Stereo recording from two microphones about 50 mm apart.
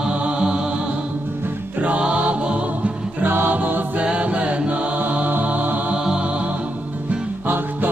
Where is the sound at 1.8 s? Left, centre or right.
Right.